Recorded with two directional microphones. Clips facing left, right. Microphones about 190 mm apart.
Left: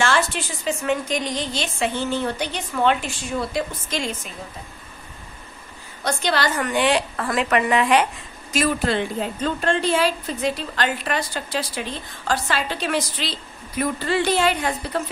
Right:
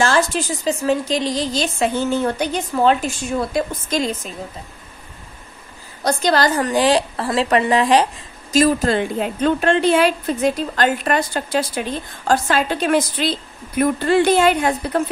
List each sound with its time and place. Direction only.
0.0 s a woman's voice: 40° right (ahead or behind)
6.0 s a woman's voice: 40° right (ahead or behind)
9.2 s a woman's voice: 65° right (ahead or behind)